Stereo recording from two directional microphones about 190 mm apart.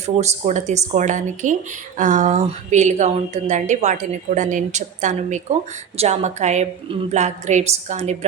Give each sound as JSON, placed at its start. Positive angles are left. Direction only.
{"t": 0.0, "sound": "a woman's voice", "side_deg": -35}